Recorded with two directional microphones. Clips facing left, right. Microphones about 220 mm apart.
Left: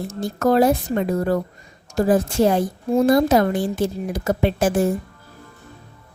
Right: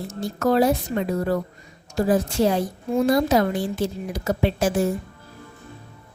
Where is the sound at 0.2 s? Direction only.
50° left (ahead or behind).